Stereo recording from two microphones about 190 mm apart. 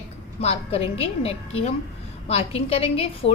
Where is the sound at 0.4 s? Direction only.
30° left (ahead or behind).